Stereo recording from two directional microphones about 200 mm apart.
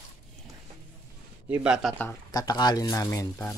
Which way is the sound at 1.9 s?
15° left (ahead or behind).